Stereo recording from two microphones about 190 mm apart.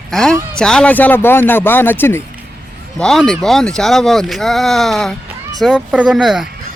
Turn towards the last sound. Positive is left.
turn(degrees=0)  # may be behind; listen again after turning